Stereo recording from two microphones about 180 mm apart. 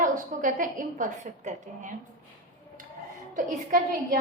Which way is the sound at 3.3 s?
50° right (ahead or behind).